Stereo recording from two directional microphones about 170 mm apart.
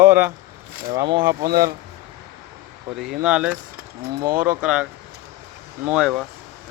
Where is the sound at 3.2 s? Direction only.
5° right (ahead or behind).